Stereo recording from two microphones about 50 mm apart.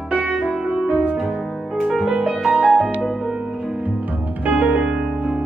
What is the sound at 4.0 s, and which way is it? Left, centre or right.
Music, right.